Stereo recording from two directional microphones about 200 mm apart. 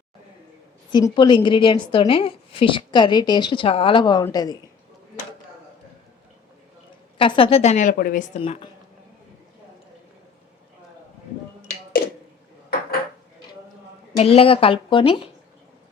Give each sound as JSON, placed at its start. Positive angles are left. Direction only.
{"t": 0.9, "sound": "a woman's voice", "side_deg": 20}
{"t": 7.2, "sound": "a woman's voice", "side_deg": 25}
{"t": 8.4, "sound": "a woman's voice", "side_deg": 25}
{"t": 14.2, "sound": "a woman's voice", "side_deg": 30}